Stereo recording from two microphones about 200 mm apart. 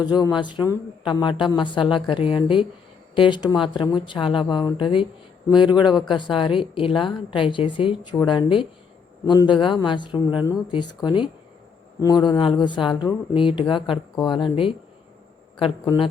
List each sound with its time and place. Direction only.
0.1 s speech: 20° left (ahead or behind)